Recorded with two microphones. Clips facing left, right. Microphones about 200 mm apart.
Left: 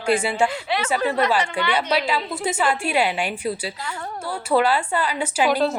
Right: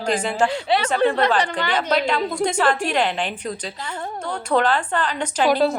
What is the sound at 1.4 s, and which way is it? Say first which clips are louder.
Speech: even; 40° right (ahead or behind).